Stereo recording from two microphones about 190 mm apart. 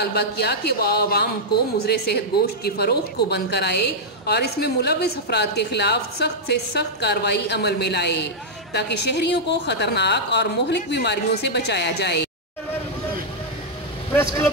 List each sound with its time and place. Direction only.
0.0 s a woman's voice: 60° left (ahead or behind)